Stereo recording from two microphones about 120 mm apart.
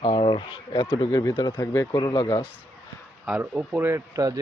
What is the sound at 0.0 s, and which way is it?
Speech, 45° left (ahead or behind).